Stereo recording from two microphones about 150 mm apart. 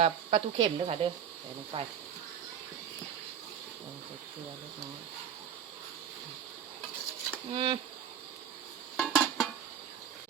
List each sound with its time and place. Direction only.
0.0 s speech: 40° right (ahead or behind)
7.5 s speech: 40° right (ahead or behind)
9.0 s a sound: centre (ahead or behind)